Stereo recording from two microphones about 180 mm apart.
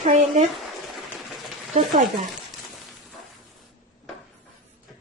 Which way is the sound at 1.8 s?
45° right (ahead or behind).